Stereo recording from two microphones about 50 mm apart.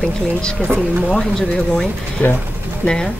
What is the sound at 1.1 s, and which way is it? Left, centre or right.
Speech, centre.